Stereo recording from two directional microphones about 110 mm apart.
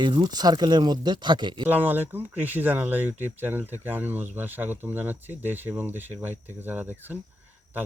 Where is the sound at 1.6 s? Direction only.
15° right (ahead or behind).